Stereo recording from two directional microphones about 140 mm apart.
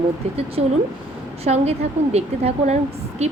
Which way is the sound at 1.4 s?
50° right (ahead or behind).